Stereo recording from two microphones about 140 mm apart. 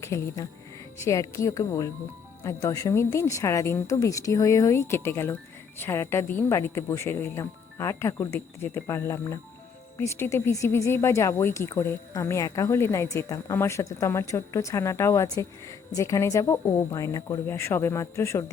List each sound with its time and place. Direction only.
0.0 s speech: 20° left (ahead or behind)